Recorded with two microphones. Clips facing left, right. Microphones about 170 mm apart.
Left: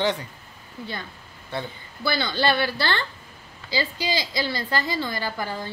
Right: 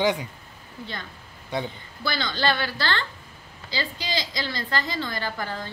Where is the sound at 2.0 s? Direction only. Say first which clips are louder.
Left 2 dB; 10° left (ahead or behind).